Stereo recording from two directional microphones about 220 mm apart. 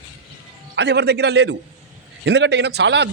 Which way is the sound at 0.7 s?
50° right (ahead or behind).